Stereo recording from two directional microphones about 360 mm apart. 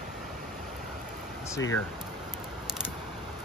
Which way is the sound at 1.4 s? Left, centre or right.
Centre.